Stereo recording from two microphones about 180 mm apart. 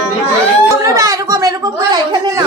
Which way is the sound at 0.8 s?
20° right (ahead or behind).